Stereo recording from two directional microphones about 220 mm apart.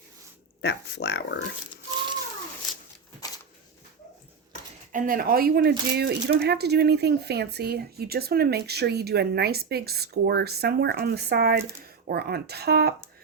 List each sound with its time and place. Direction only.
0.6 s speech: 50° left (ahead or behind)
4.9 s speech: 40° right (ahead or behind)